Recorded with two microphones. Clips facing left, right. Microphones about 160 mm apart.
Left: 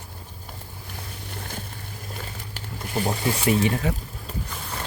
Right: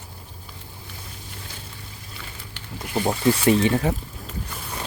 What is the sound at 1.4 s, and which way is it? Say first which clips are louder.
Boat: left 8 dB; 50° left (ahead or behind).